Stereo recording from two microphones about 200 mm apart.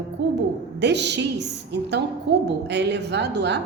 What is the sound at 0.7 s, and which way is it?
A woman's voice, 60° right (ahead or behind).